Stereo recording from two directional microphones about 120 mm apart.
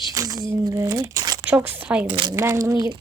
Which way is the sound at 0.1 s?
30° right (ahead or behind).